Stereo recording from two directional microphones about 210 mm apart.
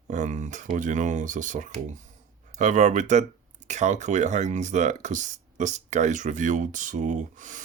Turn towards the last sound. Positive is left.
turn(degrees=-35)  # may be behind; listen again after turning